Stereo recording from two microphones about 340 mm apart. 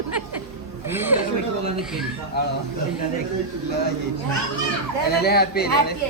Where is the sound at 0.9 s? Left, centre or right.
Centre.